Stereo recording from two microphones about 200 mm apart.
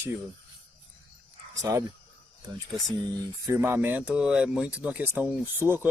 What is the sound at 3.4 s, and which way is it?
Speech, 10° right (ahead or behind).